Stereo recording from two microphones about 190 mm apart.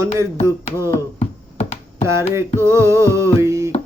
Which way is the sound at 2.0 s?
15° right (ahead or behind).